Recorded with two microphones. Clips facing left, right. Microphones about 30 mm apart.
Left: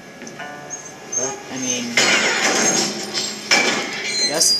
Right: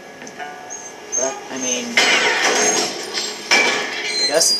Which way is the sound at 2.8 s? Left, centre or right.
Right.